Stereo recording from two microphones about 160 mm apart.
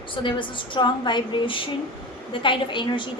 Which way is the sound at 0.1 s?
30° left (ahead or behind).